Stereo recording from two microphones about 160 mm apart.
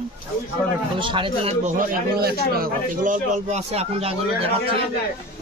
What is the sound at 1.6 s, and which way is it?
Speech, 70° right (ahead or behind).